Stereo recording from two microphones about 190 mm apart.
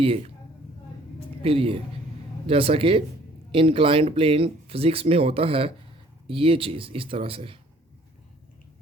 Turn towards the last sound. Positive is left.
turn(degrees=-30)  # may be behind; listen again after turning